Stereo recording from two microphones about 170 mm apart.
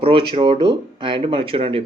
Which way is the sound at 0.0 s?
30° right (ahead or behind).